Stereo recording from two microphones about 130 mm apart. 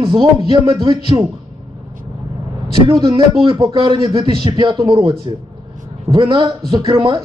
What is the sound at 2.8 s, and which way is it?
A man's voice, 35° right (ahead or behind).